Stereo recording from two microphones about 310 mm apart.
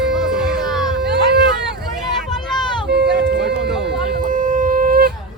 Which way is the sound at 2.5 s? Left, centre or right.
Centre.